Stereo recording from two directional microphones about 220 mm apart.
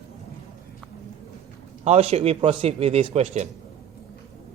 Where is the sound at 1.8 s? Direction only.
30° right (ahead or behind).